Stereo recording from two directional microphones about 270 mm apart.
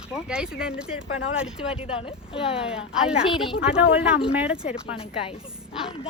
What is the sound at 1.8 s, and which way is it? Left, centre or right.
Speech, centre.